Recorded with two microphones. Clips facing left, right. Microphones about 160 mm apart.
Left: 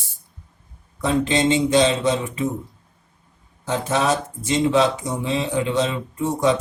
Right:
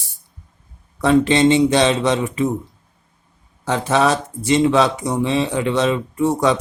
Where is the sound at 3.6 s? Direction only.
70° right (ahead or behind).